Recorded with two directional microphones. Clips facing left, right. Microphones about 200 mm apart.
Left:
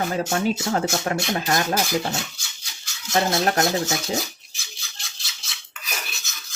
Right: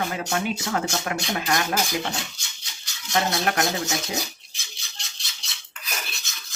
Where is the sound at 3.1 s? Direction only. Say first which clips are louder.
Left 3 dB; 30° left (ahead or behind).